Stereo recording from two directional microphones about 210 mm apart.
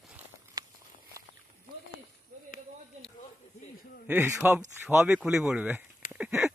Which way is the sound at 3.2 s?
35° left (ahead or behind).